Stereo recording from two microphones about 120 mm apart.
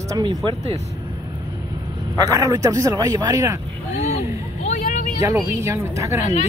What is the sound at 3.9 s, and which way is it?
Vehicle, 70° left (ahead or behind).